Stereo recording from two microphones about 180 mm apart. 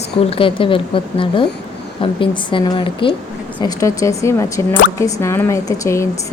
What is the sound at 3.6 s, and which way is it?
A woman's voice, 15° left (ahead or behind).